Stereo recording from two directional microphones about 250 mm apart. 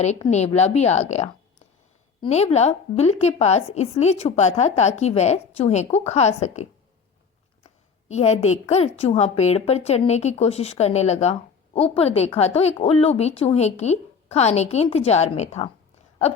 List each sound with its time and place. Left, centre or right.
0.0 s a woman's voice: left